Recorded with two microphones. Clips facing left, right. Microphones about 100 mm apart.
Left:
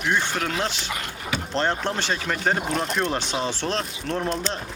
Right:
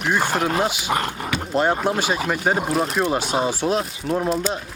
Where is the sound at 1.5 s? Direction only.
10° right (ahead or behind).